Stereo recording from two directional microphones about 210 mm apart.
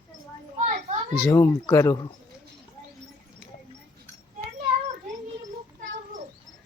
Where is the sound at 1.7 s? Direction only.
15° left (ahead or behind).